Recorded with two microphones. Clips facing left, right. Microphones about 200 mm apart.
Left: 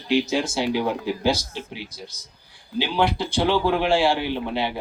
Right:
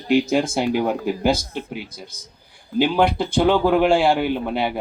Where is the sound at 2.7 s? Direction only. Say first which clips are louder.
Right 5 dB; 50° right (ahead or behind).